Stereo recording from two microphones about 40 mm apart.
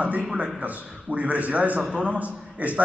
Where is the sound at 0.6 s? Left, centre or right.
Right.